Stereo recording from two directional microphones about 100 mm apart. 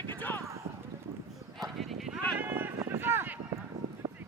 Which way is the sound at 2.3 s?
20° right (ahead or behind).